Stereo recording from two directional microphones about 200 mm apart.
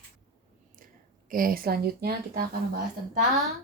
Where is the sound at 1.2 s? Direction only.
45° right (ahead or behind).